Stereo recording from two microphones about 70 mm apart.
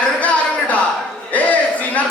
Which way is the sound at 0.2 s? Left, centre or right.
Centre.